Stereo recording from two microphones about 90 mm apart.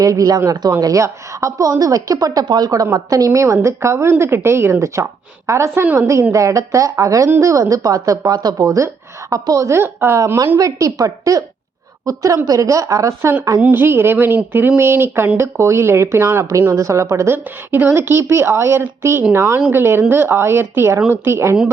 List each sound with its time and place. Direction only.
0.0 s a woman's voice: 40° right (ahead or behind)
2.6 s a woman's voice: 40° right (ahead or behind)
7.3 s speech: 25° right (ahead or behind)
7.5 s a woman's voice: 45° right (ahead or behind); by 10.3 s 25° right (ahead or behind)
10.6 s a woman's voice: 40° right (ahead or behind)
13.6 s speech: 20° right (ahead or behind)